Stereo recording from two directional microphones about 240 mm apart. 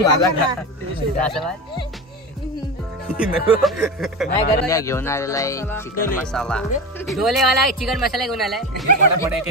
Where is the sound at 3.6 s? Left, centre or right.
Centre.